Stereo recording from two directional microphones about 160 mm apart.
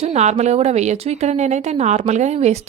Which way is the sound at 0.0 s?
45° right (ahead or behind).